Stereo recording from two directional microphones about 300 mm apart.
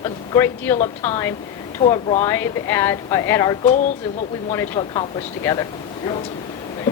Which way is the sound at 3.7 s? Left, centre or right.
Left.